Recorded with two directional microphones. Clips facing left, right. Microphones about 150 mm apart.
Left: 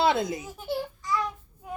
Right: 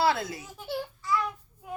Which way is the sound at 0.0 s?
20° left (ahead or behind).